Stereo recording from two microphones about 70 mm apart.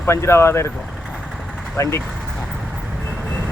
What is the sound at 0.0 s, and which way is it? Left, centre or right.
Speech, left.